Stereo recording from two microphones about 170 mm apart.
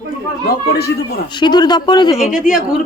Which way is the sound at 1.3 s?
25° left (ahead or behind).